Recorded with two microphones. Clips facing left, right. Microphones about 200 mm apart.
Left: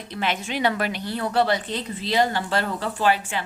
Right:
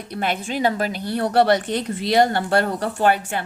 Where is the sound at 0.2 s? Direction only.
50° right (ahead or behind).